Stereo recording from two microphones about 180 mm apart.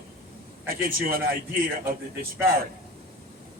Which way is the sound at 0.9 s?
55° right (ahead or behind).